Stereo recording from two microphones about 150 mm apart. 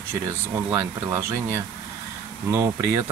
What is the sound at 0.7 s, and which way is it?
Speech, 15° right (ahead or behind).